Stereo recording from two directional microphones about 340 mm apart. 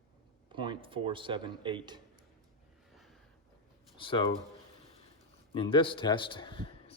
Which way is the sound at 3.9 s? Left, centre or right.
Centre.